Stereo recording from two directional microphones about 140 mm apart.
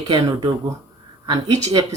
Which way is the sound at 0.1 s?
35° right (ahead or behind).